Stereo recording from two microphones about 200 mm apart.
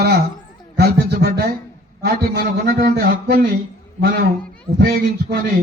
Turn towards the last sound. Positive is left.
turn(degrees=-50)  # may be behind; listen again after turning